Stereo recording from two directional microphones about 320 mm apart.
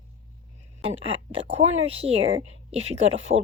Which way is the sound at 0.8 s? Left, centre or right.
Centre.